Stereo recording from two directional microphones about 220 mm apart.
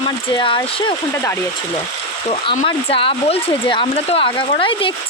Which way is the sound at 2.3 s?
25° left (ahead or behind).